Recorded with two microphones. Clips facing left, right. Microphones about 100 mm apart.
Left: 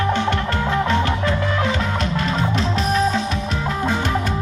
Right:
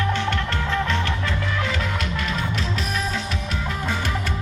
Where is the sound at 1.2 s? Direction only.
35° left (ahead or behind).